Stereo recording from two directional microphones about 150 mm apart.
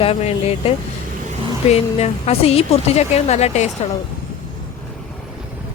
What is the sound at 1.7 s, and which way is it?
A woman's voice, 45° left (ahead or behind).